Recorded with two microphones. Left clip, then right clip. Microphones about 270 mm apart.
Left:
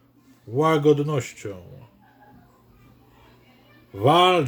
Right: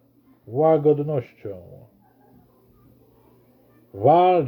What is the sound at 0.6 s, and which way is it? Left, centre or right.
Speech, centre.